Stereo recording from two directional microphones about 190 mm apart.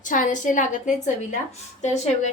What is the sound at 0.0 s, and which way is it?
A woman's voice, 45° left (ahead or behind).